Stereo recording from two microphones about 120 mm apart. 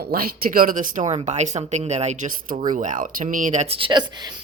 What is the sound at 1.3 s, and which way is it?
Speech, 75° right (ahead or behind).